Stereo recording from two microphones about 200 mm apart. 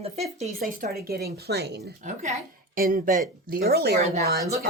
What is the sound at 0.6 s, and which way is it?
A woman's voice, 50° right (ahead or behind).